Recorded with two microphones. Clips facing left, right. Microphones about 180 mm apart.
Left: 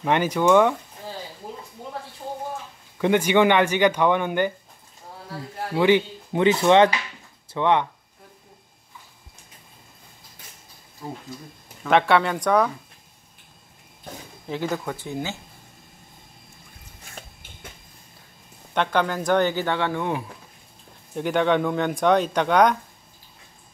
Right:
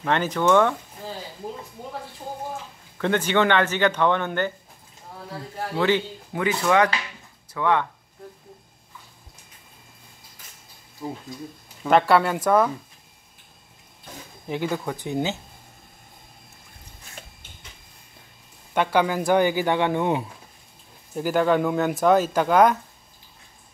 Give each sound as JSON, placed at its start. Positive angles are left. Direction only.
{"t": 0.0, "sound": "speech", "side_deg": 10}
{"t": 3.0, "sound": "speech", "side_deg": 10}
{"t": 5.8, "sound": "speech", "side_deg": 15}
{"t": 11.9, "sound": "speech", "side_deg": 0}
{"t": 14.5, "sound": "speech", "side_deg": -15}
{"t": 18.7, "sound": "speech", "side_deg": -10}
{"t": 21.1, "sound": "speech", "side_deg": -5}